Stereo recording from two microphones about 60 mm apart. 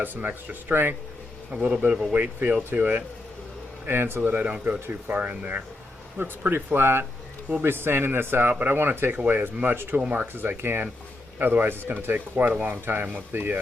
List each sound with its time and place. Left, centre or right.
0.0 s speech: right
1.5 s a man's voice: right
2.1 s speech: right
10.0 s speech: centre
10.3 s speech: right